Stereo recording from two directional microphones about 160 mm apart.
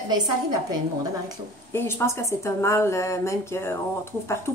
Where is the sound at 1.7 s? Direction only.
15° left (ahead or behind).